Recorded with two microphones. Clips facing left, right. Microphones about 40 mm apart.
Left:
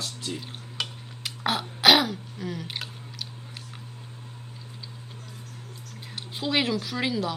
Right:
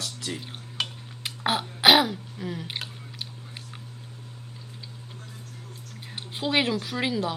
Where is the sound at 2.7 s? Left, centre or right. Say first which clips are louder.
Even; centre.